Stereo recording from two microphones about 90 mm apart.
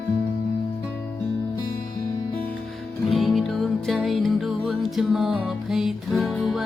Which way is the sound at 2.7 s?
Centre (ahead or behind).